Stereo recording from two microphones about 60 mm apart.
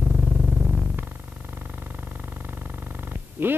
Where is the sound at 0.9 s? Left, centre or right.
Right.